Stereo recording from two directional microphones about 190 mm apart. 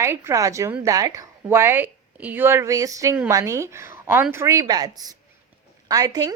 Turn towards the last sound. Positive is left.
turn(degrees=-20)  # may be behind; listen again after turning